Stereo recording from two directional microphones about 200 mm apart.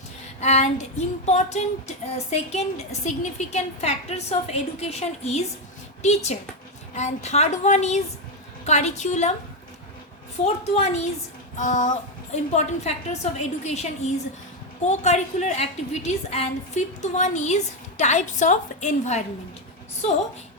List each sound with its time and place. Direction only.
0.3 s female singing: 35° left (ahead or behind)
6.0 s speech: 35° left (ahead or behind)
6.9 s female singing: 35° left (ahead or behind)
10.4 s female singing: 35° left (ahead or behind)